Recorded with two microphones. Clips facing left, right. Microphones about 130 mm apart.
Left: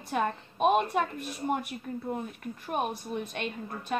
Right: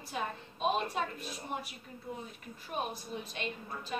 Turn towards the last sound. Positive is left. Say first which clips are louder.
# left 6 dB
turn(degrees=60)  # may be behind; listen again after turning